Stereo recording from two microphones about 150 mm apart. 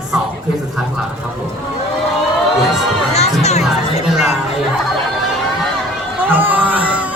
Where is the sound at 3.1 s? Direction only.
45° left (ahead or behind).